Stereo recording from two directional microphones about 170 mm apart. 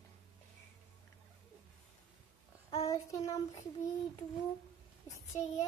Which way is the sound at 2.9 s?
20° left (ahead or behind).